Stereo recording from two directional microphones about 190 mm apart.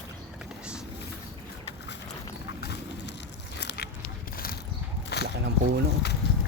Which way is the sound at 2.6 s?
60° left (ahead or behind).